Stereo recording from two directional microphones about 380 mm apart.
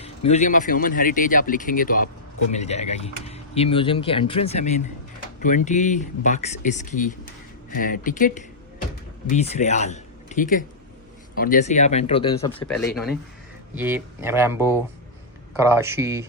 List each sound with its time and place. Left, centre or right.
0.3 s speech: centre
12.6 s speech: centre